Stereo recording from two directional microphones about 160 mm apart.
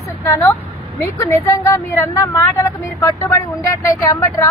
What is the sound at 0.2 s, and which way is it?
A woman's voice, 15° left (ahead or behind).